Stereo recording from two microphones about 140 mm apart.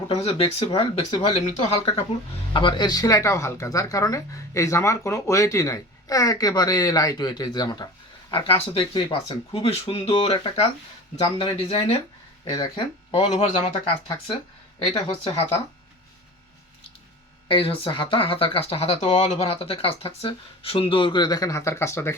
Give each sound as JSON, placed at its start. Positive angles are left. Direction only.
{"t": 0.1, "sound": "speech", "side_deg": 40}
{"t": 1.3, "sound": "speech", "side_deg": 50}
{"t": 2.5, "sound": "speech", "side_deg": 35}
{"t": 8.3, "sound": "speech", "side_deg": 40}
{"t": 17.5, "sound": "speech", "side_deg": 40}